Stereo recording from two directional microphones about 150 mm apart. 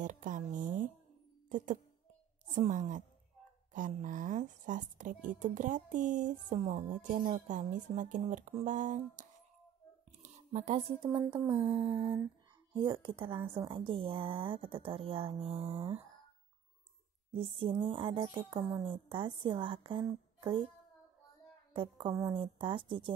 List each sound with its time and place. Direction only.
0.0 s a sound: 60° right (ahead or behind)
2.5 s music: 55° right (ahead or behind)
10.2 s speech: 50° right (ahead or behind)
11.1 s a sound: 25° right (ahead or behind)
12.7 s a woman's voice: 30° right (ahead or behind)
17.3 s a woman's voice: 35° right (ahead or behind)
21.7 s a woman's voice: 35° right (ahead or behind)